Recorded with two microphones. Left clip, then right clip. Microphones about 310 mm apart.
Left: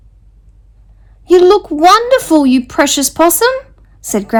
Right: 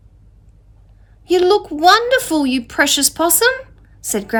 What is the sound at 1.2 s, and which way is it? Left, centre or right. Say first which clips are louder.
A woman's voice: left 6 dB; centre.